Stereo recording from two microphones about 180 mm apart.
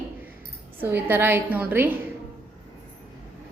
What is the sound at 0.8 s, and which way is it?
A woman's voice, 10° right (ahead or behind).